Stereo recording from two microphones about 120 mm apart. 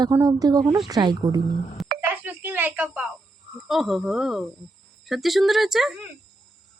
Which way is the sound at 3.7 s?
Centre (ahead or behind).